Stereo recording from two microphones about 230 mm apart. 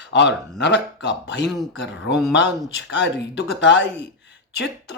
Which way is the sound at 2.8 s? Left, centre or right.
Left.